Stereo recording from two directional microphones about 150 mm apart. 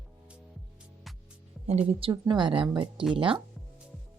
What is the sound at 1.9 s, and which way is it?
Speech, 35° right (ahead or behind).